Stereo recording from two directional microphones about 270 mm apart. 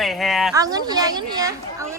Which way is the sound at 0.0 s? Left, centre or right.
Centre.